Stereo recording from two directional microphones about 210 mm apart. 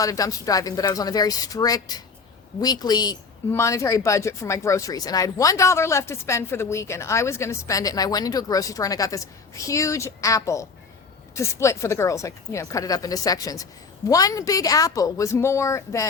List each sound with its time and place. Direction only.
0.0 s speech: 15° left (ahead or behind)